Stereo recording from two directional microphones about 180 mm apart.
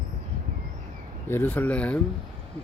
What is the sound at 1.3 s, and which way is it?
Speech, 10° left (ahead or behind).